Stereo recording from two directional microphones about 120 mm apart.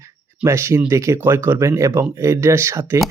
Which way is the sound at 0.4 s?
20° right (ahead or behind).